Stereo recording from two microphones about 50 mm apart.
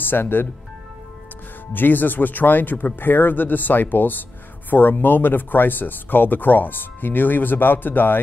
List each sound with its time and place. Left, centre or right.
0.0 s speech: left
1.7 s speech: left